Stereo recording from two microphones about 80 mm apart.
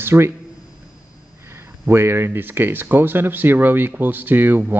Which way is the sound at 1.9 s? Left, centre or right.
Right.